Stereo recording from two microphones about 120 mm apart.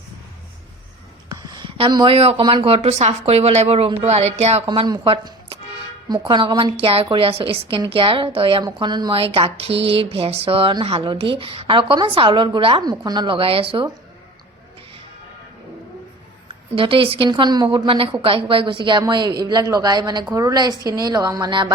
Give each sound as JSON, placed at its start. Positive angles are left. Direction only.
{"t": 1.3, "sound": "a sound", "side_deg": -35}
{"t": 2.4, "sound": "a woman's voice", "side_deg": -40}
{"t": 2.6, "sound": "a woman's voice", "side_deg": -55}
{"t": 4.6, "sound": "a woman's voice", "side_deg": -40}
{"t": 8.6, "sound": "a woman's voice", "side_deg": -35}
{"t": 16.7, "sound": "a woman's voice", "side_deg": -45}